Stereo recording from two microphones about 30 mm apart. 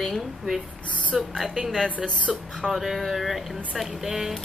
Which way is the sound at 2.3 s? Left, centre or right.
Centre.